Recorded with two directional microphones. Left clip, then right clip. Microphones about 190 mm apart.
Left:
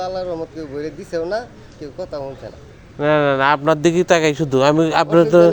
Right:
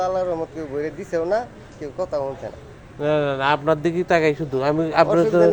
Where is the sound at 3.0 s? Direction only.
50° left (ahead or behind); by 5.2 s 75° left (ahead or behind).